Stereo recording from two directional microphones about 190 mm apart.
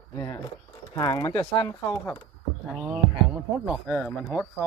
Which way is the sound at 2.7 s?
5° right (ahead or behind).